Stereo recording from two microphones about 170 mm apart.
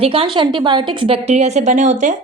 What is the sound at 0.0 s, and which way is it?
A woman's voice, 30° right (ahead or behind).